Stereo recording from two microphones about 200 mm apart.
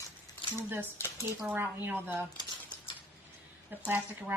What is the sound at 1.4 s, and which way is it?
Speech, 10° right (ahead or behind).